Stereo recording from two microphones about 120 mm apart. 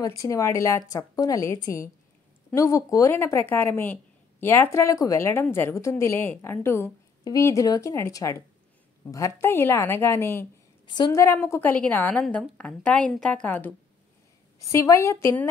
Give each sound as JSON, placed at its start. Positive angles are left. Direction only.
{"t": 0.0, "sound": "speech", "side_deg": 30}
{"t": 10.9, "sound": "a woman's voice", "side_deg": 40}
{"t": 11.1, "sound": "a woman's voice", "side_deg": 20}